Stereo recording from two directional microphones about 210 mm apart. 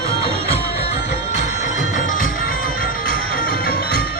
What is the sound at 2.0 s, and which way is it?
Music, 40° left (ahead or behind).